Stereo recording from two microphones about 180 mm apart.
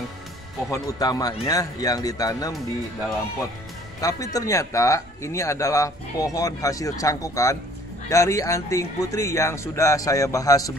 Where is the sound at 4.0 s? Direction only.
20° left (ahead or behind).